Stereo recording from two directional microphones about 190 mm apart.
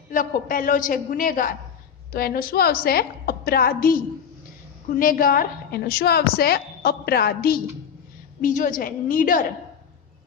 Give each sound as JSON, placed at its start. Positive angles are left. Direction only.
{"t": 0.1, "sound": "a woman's voice", "side_deg": 45}